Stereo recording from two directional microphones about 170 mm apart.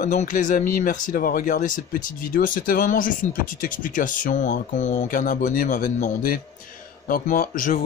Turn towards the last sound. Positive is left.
turn(degrees=50)  # may be behind; listen again after turning